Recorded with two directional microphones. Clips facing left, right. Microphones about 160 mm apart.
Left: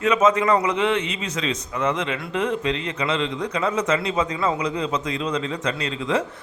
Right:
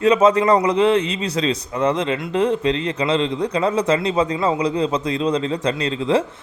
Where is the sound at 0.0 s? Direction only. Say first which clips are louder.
Right 4 dB; 35° right (ahead or behind).